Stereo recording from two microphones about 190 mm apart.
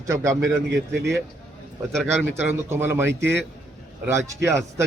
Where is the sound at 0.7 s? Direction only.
65° right (ahead or behind).